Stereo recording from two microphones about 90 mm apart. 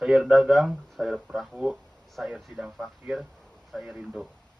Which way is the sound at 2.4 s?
Centre (ahead or behind).